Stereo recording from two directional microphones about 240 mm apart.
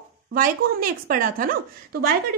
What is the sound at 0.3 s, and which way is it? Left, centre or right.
A woman's voice, right.